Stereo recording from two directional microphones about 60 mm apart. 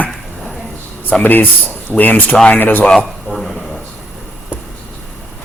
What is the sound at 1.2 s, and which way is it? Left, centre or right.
A man's voice, left.